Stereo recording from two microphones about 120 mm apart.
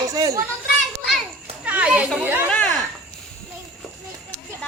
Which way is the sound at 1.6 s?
10° right (ahead or behind).